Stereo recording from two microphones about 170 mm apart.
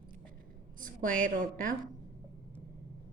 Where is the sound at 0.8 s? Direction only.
50° right (ahead or behind).